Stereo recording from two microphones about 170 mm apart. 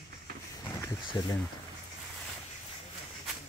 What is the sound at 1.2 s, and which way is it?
Speech, 25° left (ahead or behind).